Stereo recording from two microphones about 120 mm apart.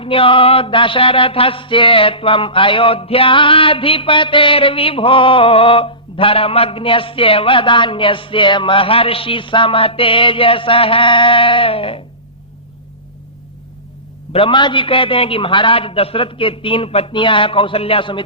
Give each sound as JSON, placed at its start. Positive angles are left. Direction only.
{"t": 0.0, "sound": "mantra", "side_deg": 50}
{"t": 14.3, "sound": "mantra", "side_deg": 45}